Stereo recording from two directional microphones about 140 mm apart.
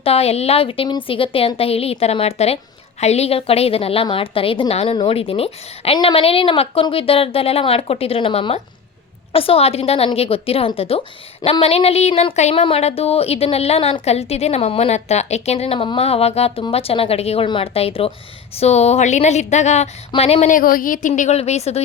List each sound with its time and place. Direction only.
0.0 s a woman's voice: 45° left (ahead or behind)
20.5 s a woman's voice: 85° left
21.1 s a woman's voice: 50° left (ahead or behind)